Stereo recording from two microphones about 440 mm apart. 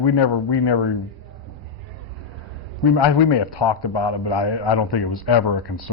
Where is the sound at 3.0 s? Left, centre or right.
Left.